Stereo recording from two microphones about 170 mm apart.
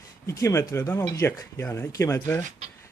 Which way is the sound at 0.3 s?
15° left (ahead or behind).